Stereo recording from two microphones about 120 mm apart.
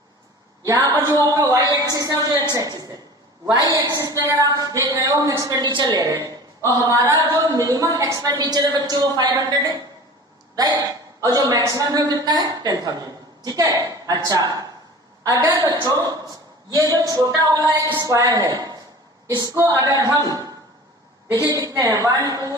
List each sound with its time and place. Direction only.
0.6 s a woman's voice: 25° right (ahead or behind)
5.6 s a woman's voice: 40° right (ahead or behind)